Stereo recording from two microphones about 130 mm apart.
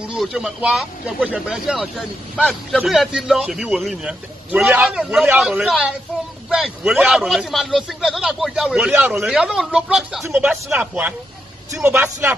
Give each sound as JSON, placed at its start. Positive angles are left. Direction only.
{"t": 0.1, "sound": "speech", "side_deg": 0}